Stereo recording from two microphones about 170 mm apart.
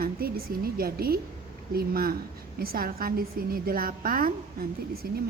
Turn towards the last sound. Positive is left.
turn(degrees=-70)  # may be behind; listen again after turning